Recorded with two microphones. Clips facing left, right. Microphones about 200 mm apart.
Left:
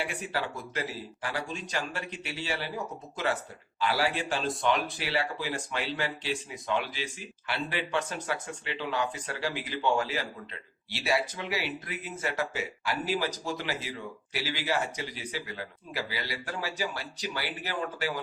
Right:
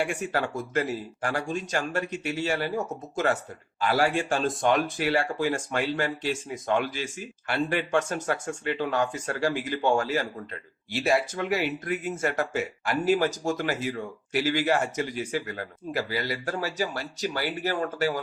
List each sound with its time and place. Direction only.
0.0 s speech: 45° right (ahead or behind)